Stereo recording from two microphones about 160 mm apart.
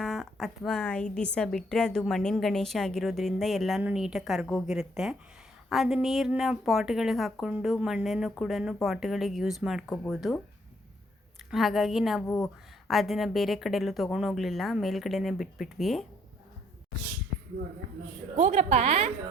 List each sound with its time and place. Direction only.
0.0 s a woman's voice: centre (ahead or behind)
11.5 s a woman's voice: centre (ahead or behind)
18.3 s a woman's voice: 45° right (ahead or behind)